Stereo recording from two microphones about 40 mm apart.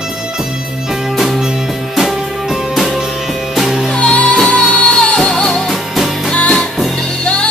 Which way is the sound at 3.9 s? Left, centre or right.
Left.